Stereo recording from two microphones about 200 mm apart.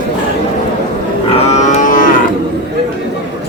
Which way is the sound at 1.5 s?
35° left (ahead or behind).